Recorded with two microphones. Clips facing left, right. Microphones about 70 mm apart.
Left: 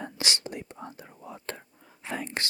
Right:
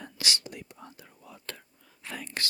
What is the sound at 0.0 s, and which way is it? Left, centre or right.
Whispering, left.